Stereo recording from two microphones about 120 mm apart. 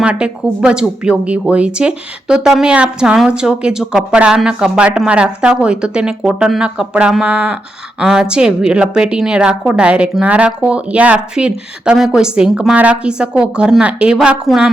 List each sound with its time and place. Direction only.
0.0 s speech: 10° right (ahead or behind)